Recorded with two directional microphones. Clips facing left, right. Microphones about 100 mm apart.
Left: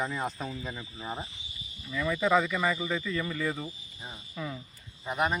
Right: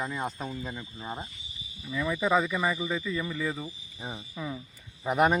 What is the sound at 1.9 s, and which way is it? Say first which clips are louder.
Speech: even; 15° right (ahead or behind).